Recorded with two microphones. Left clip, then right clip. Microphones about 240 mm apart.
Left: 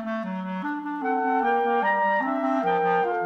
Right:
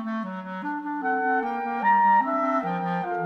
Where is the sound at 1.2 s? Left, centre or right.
Right.